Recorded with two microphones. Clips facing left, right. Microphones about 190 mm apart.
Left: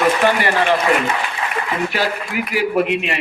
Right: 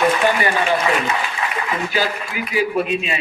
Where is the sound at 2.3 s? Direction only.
70° left (ahead or behind).